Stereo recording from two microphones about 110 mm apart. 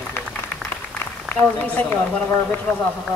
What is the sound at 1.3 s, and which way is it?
Speech, 15° left (ahead or behind).